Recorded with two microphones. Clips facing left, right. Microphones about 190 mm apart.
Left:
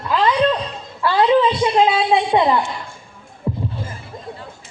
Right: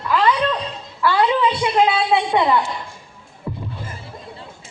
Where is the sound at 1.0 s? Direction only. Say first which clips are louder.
Left 3 dB; 25° left (ahead or behind).